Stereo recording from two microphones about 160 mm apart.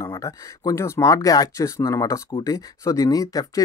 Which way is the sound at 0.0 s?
20° left (ahead or behind).